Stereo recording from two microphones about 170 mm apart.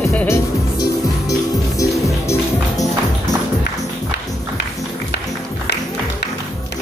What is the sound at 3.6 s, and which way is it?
Music, 75° left (ahead or behind).